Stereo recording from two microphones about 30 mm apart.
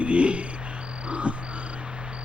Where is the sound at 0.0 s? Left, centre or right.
Right.